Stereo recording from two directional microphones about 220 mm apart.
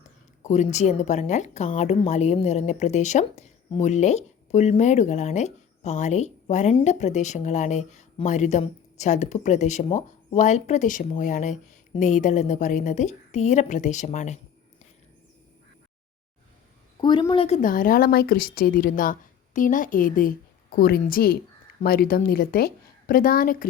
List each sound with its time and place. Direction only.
0.4 s a woman's voice: 30° left (ahead or behind)
17.0 s a woman's voice: 20° left (ahead or behind); by 23.6 s 40° left (ahead or behind)